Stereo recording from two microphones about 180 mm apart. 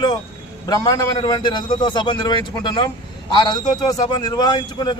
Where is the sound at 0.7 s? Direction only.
20° left (ahead or behind).